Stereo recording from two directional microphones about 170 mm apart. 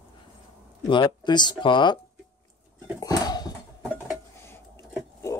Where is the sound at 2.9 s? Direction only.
20° left (ahead or behind).